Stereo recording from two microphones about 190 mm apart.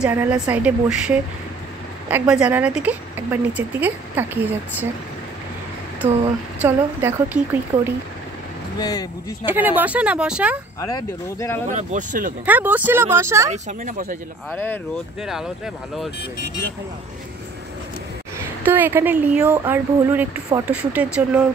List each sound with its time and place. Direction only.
0.0 s speech: 10° right (ahead or behind)
6.6 s speech: 10° right (ahead or behind)
8.7 s speech: 20° left (ahead or behind)
9.5 s speech: 10° right (ahead or behind)
10.8 s speech: 15° left (ahead or behind)
11.7 s speech: 40° right (ahead or behind)
12.4 s speech: 10° right (ahead or behind)
13.5 s speech: 40° right (ahead or behind)
14.5 s speech: 10° left (ahead or behind)
15.2 s speech: centre (ahead or behind)
18.7 s speech: 10° right (ahead or behind)